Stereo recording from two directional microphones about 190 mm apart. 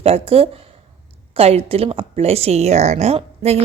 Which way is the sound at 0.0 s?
30° right (ahead or behind).